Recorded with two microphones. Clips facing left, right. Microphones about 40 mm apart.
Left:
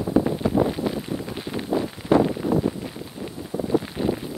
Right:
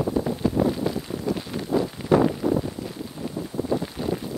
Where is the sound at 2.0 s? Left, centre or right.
Centre.